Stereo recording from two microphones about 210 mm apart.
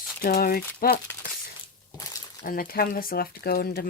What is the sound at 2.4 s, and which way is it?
Speech, 45° left (ahead or behind).